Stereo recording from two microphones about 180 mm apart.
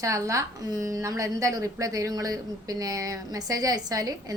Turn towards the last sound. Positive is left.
turn(degrees=-20)  # may be behind; listen again after turning